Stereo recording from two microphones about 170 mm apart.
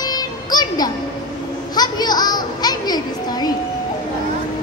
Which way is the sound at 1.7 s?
25° left (ahead or behind).